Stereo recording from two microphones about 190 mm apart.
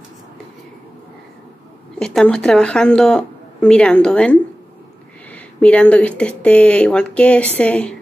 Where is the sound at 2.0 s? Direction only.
5° left (ahead or behind).